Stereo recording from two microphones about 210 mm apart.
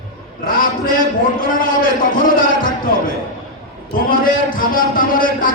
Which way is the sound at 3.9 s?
40° left (ahead or behind).